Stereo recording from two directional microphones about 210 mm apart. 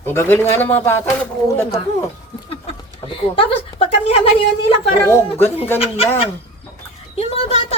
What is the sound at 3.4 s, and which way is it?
Speech, 25° left (ahead or behind).